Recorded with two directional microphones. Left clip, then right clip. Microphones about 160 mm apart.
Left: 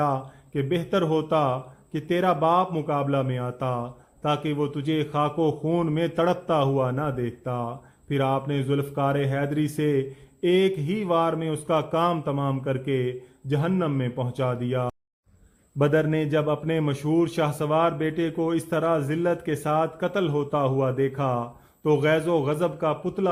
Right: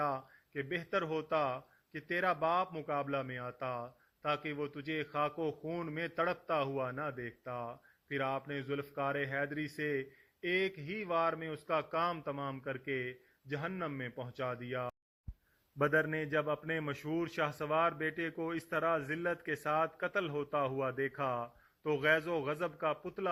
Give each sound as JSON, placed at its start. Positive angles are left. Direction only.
{"t": 0.0, "sound": "a man's voice", "side_deg": -15}